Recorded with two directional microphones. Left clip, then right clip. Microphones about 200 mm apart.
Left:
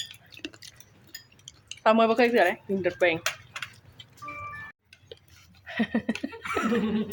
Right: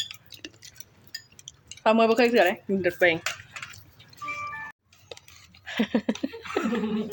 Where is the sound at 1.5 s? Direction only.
Centre (ahead or behind).